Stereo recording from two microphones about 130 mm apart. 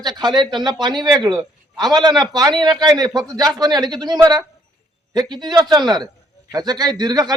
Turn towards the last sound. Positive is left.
turn(degrees=-30)  # may be behind; listen again after turning